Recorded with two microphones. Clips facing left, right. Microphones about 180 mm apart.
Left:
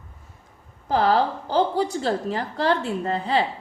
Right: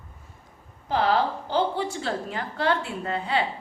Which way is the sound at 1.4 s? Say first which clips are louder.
Left 3 dB; 40° left (ahead or behind).